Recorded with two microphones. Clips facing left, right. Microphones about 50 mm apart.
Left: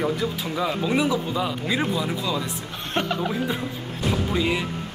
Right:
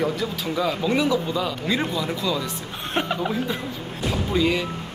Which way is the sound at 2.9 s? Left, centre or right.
Centre.